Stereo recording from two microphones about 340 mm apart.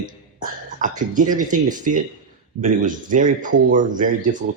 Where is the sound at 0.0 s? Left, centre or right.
Right.